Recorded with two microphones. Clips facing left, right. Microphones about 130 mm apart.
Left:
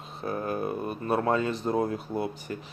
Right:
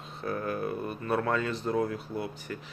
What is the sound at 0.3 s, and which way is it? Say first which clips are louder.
Speech: left 2 dB; 25° left (ahead or behind).